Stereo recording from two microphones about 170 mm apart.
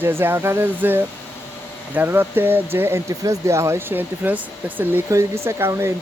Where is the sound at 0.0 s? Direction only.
15° right (ahead or behind).